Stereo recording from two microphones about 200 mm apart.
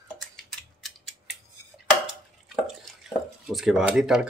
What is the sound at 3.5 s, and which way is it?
Speech, centre (ahead or behind).